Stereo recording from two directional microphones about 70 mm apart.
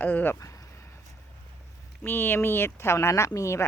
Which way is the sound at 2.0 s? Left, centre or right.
Left.